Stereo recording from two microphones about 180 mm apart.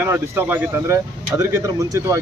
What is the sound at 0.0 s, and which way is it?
Speech, 10° right (ahead or behind).